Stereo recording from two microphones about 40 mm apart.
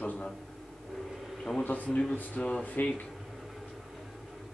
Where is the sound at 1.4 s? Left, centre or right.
Centre.